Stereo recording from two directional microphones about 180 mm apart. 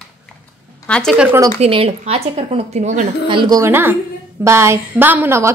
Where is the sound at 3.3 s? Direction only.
25° right (ahead or behind).